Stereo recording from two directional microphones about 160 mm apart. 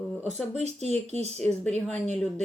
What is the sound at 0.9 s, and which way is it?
Speech, 40° right (ahead or behind).